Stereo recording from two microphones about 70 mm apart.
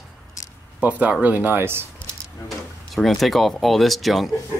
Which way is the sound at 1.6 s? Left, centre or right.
Right.